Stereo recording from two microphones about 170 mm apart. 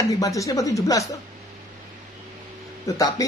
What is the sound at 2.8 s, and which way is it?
Speech, 20° left (ahead or behind).